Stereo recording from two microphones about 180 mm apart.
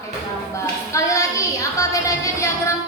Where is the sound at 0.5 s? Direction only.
15° left (ahead or behind).